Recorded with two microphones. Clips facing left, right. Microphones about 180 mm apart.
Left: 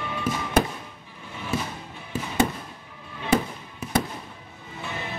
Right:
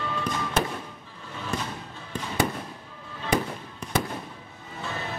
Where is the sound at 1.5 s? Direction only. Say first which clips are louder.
Left 4 dB; 5° left (ahead or behind).